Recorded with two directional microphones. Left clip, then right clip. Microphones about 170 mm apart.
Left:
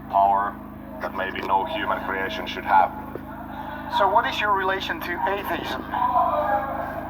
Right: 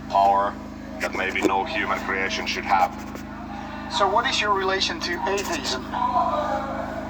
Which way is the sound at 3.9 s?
30° left (ahead or behind).